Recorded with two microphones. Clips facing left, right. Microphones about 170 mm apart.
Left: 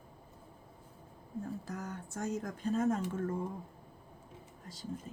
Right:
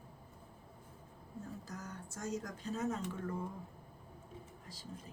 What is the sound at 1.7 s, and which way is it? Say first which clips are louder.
Speech: left 6 dB; 60° left (ahead or behind).